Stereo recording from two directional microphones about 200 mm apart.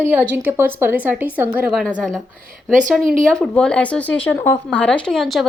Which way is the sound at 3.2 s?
5° left (ahead or behind).